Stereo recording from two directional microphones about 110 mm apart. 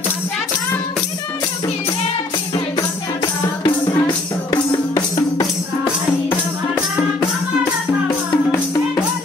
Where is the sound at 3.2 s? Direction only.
40° left (ahead or behind).